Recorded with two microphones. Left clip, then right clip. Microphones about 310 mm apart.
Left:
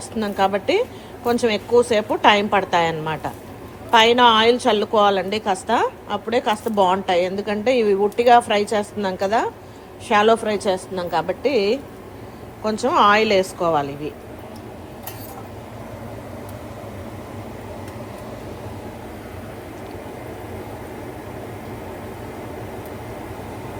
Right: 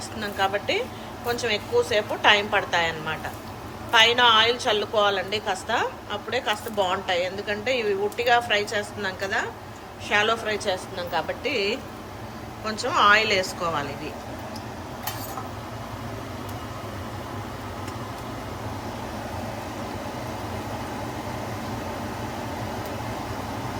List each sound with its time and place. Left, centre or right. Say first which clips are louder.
0.2 s a woman's voice: left 5 dB; centre